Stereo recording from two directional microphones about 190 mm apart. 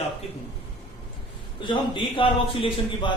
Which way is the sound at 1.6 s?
25° left (ahead or behind).